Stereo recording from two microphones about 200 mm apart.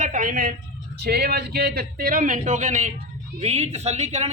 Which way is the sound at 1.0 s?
55° right (ahead or behind).